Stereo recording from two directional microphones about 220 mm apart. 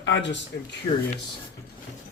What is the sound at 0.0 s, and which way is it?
Speech, 55° left (ahead or behind).